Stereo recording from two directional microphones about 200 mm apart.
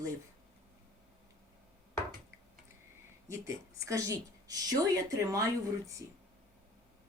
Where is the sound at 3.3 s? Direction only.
15° right (ahead or behind).